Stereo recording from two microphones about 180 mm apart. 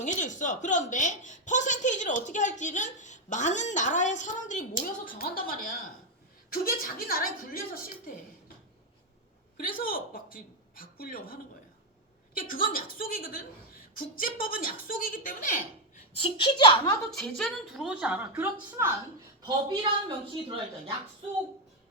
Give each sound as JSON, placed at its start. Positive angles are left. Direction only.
{"t": 0.0, "sound": "a woman's voice", "side_deg": 45}
{"t": 9.6, "sound": "a woman's voice", "side_deg": 50}
{"t": 16.1, "sound": "speech", "side_deg": 30}
{"t": 17.1, "sound": "a woman's voice", "side_deg": 5}
{"t": 19.4, "sound": "speech", "side_deg": -25}